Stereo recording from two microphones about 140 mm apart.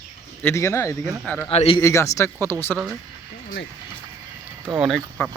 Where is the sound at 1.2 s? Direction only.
10° left (ahead or behind).